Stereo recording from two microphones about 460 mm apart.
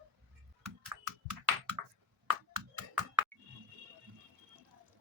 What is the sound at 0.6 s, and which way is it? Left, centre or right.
Typing, right.